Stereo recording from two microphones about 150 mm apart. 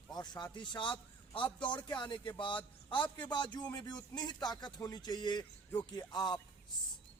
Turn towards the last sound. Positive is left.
turn(degrees=30)  # may be behind; listen again after turning